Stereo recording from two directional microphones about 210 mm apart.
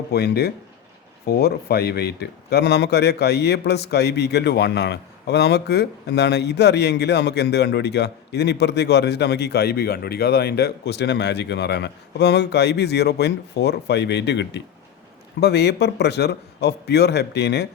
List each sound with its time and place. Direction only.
0.1 s a man's voice: 50° left (ahead or behind)